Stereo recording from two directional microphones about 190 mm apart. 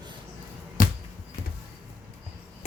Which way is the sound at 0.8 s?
45° left (ahead or behind).